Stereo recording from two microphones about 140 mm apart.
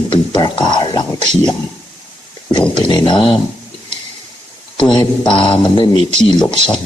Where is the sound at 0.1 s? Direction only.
35° left (ahead or behind).